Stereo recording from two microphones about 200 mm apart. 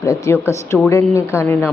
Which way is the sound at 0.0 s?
15° left (ahead or behind).